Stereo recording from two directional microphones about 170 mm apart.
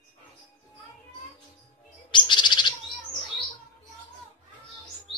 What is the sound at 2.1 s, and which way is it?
Bird, 25° left (ahead or behind).